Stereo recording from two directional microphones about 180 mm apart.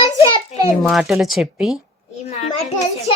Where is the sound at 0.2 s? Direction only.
25° left (ahead or behind).